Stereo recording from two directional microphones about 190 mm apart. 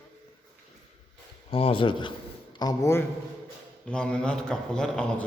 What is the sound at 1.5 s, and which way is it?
A man's voice, 30° left (ahead or behind).